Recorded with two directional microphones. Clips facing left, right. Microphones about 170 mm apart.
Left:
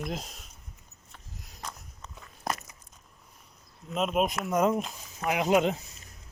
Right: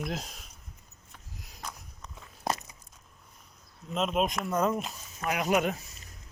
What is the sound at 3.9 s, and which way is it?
Speech, 5° left (ahead or behind).